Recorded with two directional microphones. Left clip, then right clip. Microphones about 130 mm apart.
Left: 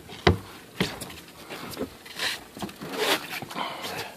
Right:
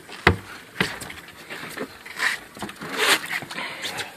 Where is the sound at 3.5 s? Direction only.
25° left (ahead or behind).